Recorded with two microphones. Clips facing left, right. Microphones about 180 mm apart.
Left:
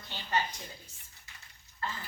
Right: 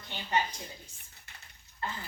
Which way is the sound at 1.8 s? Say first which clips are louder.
Even; 20° right (ahead or behind).